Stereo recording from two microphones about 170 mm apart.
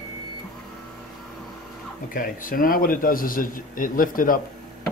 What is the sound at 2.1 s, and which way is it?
A man's voice, 55° left (ahead or behind).